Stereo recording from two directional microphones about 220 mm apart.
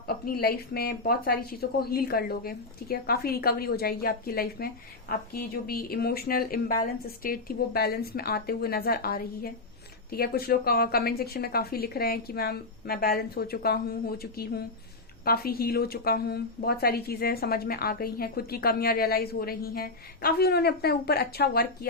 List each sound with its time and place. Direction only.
0.3 s a woman's voice: 45° left (ahead or behind)